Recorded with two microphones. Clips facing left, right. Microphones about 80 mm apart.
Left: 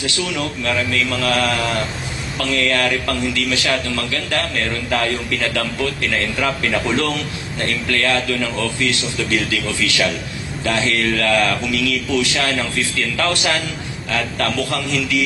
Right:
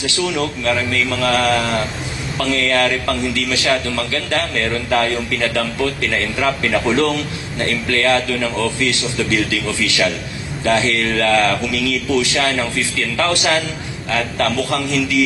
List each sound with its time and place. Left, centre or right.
0.0 s a man's voice: right
2.5 s a man's voice: right
6.8 s a man's voice: right